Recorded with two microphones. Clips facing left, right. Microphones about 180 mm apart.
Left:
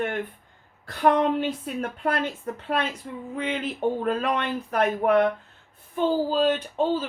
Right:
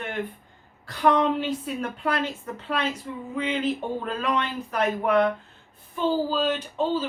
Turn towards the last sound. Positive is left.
turn(degrees=50)  # may be behind; listen again after turning